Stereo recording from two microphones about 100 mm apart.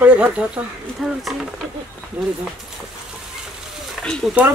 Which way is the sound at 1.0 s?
Centre (ahead or behind).